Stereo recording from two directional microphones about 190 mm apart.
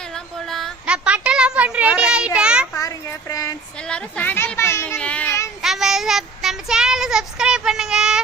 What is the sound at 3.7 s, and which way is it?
A child's voice, 5° left (ahead or behind).